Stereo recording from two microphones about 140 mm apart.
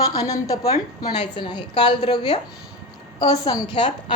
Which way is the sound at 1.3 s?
35° left (ahead or behind).